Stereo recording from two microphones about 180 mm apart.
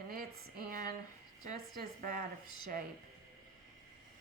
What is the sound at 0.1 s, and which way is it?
Speech, 55° right (ahead or behind).